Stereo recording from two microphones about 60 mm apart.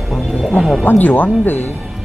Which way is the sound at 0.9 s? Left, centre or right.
Left.